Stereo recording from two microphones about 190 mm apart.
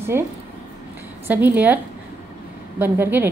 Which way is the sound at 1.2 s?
10° right (ahead or behind).